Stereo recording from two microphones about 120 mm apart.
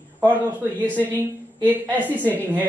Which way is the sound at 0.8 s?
15° right (ahead or behind).